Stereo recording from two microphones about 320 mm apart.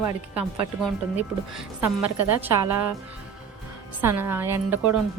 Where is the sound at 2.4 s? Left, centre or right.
Centre.